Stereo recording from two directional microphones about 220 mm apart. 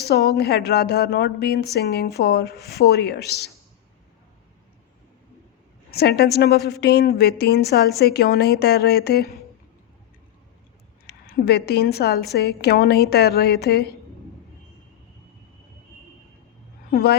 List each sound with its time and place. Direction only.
0.0 s a woman's voice: 45° left (ahead or behind)
5.9 s a woman's voice: 45° left (ahead or behind)
11.0 s a woman's voice: 45° left (ahead or behind)
16.9 s a woman's voice: 45° left (ahead or behind)